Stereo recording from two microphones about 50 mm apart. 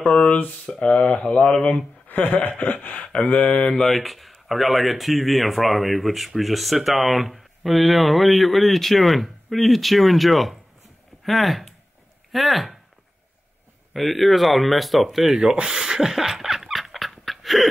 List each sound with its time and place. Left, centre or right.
0.0 s speech: left
3.8 s speech: centre
13.9 s speech: centre
15.6 s a sound: centre